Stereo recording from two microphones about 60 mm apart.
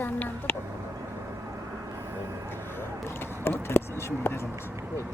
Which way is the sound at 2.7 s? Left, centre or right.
Left.